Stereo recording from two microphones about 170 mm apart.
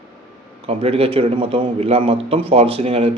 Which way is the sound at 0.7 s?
35° right (ahead or behind).